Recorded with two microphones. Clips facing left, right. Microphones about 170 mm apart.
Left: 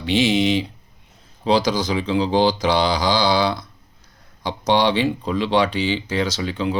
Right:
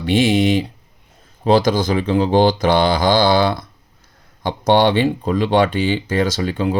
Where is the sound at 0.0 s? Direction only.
50° right (ahead or behind).